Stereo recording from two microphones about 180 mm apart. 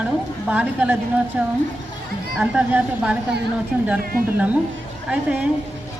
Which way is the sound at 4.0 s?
55° right (ahead or behind).